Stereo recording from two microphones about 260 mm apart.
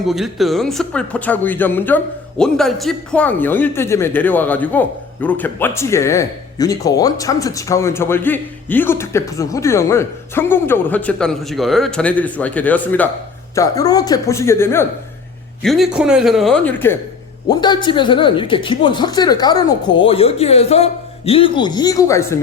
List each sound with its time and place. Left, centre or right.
0.0 s a man's voice: centre